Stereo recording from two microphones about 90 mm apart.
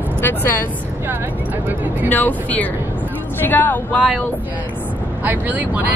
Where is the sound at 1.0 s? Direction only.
20° right (ahead or behind).